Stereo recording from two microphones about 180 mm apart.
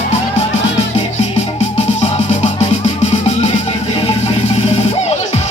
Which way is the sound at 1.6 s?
35° left (ahead or behind).